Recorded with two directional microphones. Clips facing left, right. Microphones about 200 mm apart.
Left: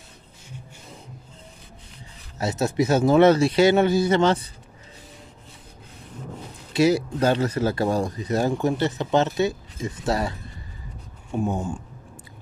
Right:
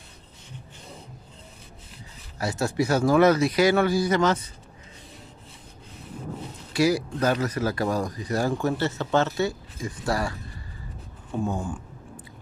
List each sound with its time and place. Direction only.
2.3 s speech: 20° left (ahead or behind)
6.7 s speech: 25° left (ahead or behind)
11.3 s speech: 20° left (ahead or behind)